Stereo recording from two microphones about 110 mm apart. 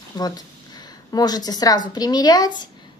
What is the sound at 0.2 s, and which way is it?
A woman's voice, 40° left (ahead or behind).